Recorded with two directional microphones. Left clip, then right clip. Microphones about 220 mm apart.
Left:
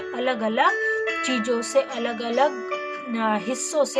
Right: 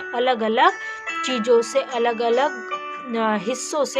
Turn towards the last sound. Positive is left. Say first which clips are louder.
# even
turn(degrees=-45)  # may be behind; listen again after turning